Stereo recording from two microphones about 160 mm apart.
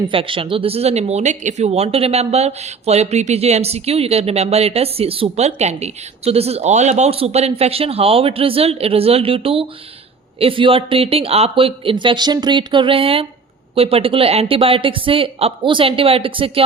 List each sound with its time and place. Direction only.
0.1 s speech: 35° right (ahead or behind)